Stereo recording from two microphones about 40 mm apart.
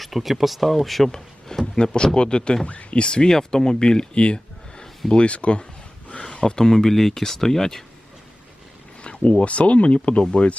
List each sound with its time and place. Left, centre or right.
0.0 s speech: centre
1.8 s speech: left
4.8 s a sound: centre
5.2 s speech: left; by 7.9 s centre
9.0 s a sound: left
9.4 s speech: left